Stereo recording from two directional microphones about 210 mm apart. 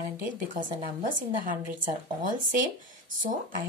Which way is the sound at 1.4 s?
40° right (ahead or behind).